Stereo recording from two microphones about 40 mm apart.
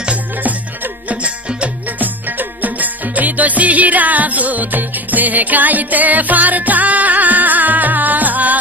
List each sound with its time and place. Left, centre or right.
1.0 s music: right
1.9 s music: right